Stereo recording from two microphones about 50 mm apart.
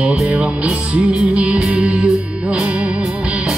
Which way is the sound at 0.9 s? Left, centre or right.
Right.